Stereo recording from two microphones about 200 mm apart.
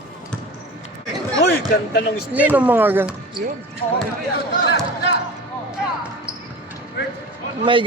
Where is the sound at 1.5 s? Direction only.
55° left (ahead or behind).